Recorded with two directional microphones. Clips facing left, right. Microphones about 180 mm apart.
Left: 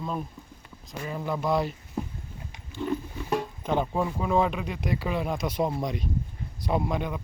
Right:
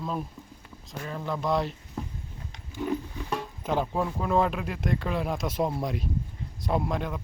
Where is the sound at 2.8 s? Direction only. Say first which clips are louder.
Even; 10° right (ahead or behind).